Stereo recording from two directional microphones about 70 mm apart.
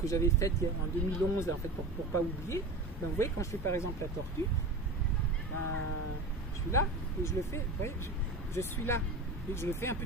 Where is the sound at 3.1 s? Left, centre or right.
Left.